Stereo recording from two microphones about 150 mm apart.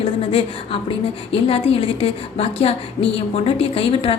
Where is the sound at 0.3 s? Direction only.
40° left (ahead or behind).